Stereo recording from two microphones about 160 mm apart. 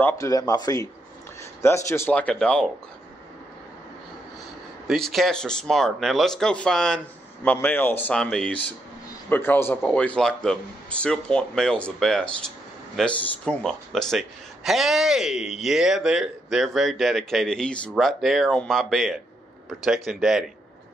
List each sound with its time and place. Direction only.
0.0 s a man's voice: 20° left (ahead or behind); by 2.7 s 5° left (ahead or behind)
4.8 s a man's voice: centre (ahead or behind)